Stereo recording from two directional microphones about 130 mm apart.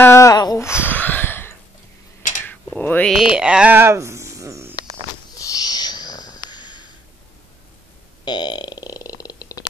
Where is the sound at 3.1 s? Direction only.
5° right (ahead or behind); by 4.7 s 25° right (ahead or behind).